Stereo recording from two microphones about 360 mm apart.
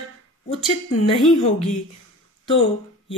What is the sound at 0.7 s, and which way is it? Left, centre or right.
Speech, centre.